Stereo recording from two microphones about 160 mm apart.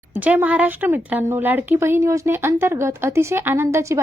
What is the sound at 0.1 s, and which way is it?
A woman's voice, 10° right (ahead or behind).